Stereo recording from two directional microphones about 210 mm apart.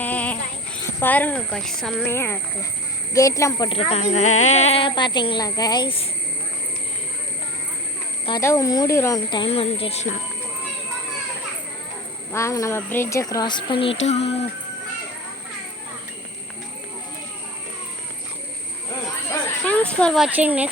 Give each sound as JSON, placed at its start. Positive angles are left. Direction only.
{"t": 0.0, "sound": "a sound", "side_deg": 5}
{"t": 0.9, "sound": "speech", "side_deg": 10}
{"t": 3.7, "sound": "speech", "side_deg": 30}
{"t": 8.3, "sound": "speech", "side_deg": 15}
{"t": 12.3, "sound": "speech", "side_deg": 15}
{"t": 19.6, "sound": "speech", "side_deg": 5}